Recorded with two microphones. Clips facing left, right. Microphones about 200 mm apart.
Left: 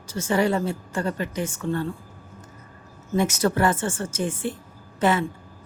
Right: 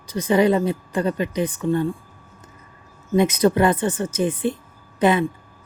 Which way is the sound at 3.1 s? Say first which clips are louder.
Right 5 dB; 20° right (ahead or behind).